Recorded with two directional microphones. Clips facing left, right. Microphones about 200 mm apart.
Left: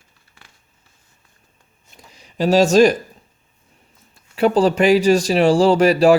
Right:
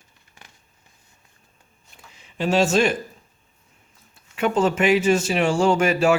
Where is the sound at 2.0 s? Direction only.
40° left (ahead or behind).